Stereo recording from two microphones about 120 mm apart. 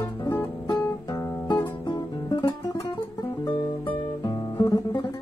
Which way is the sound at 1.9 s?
40° left (ahead or behind).